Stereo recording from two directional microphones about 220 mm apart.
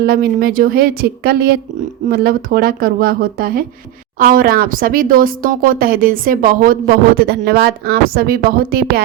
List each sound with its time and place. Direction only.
0.0 s speech: 45° right (ahead or behind)